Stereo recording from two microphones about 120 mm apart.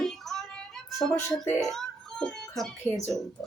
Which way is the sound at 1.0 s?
20° left (ahead or behind).